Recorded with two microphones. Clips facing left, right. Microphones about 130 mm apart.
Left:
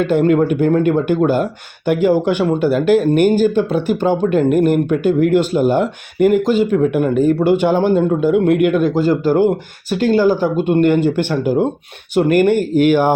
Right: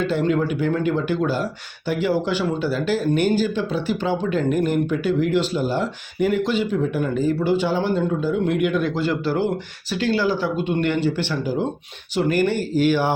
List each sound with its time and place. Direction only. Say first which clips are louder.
0.0 s speech: left 7 dB; 55° left (ahead or behind)
6.7 s speech: left 7 dB; 60° left (ahead or behind)